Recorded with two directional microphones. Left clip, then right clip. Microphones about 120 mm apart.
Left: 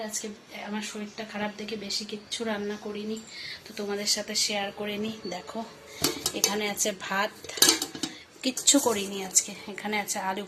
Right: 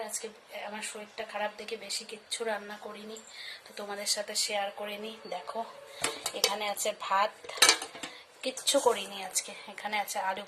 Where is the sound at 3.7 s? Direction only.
20° right (ahead or behind).